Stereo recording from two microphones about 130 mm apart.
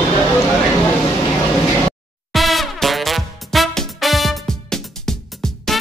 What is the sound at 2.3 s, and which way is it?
Music, centre (ahead or behind).